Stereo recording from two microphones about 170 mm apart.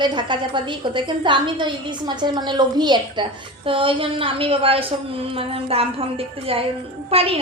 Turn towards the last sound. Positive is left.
turn(degrees=-35)  # may be behind; listen again after turning